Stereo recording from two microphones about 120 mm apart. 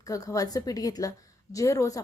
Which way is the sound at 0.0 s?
30° left (ahead or behind).